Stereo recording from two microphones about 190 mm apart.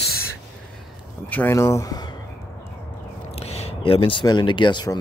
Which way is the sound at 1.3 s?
10° left (ahead or behind).